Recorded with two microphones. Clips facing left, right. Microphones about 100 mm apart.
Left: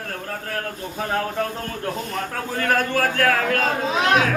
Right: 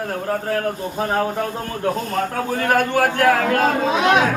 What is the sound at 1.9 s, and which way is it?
Speech, 35° right (ahead or behind).